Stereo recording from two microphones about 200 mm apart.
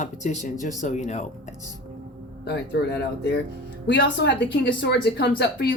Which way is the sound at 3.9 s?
60° left (ahead or behind).